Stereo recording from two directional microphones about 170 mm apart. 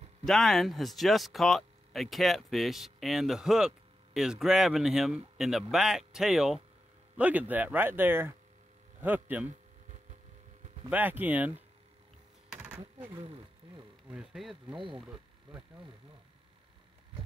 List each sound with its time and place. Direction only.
0.2 s speech: centre (ahead or behind)
10.9 s speech: 10° right (ahead or behind)
12.5 s a sound: 10° right (ahead or behind)
13.2 s a sound: 35° right (ahead or behind)
14.0 s speech: 5° right (ahead or behind)
14.7 s speech: 30° right (ahead or behind)